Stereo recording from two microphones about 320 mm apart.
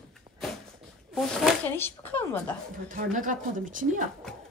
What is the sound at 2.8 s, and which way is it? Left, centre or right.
A woman's voice, right.